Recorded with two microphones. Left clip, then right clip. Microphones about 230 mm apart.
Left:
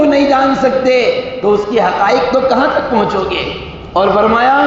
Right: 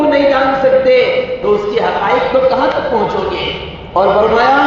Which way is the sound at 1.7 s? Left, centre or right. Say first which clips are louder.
Left 2 dB; left.